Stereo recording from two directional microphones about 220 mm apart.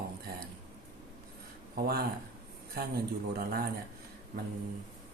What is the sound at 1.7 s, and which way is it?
Speech, 45° right (ahead or behind).